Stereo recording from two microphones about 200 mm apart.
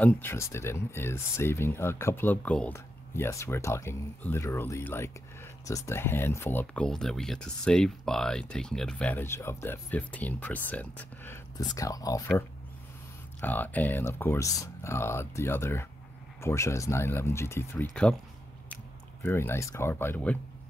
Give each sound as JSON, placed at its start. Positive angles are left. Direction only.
{"t": 0.0, "sound": "speech", "side_deg": 10}
{"t": 19.2, "sound": "speech", "side_deg": 10}